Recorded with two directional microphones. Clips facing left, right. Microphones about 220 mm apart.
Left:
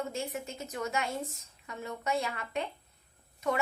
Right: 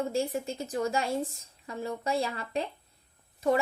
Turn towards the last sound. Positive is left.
turn(degrees=-30)  # may be behind; listen again after turning